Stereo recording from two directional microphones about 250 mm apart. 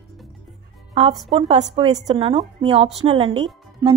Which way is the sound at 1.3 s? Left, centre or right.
Right.